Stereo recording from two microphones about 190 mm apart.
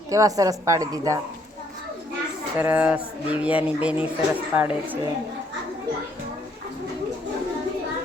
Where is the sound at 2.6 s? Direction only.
10° right (ahead or behind).